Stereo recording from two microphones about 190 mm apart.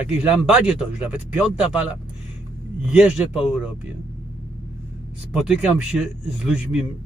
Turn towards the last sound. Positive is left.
turn(degrees=-5)  # may be behind; listen again after turning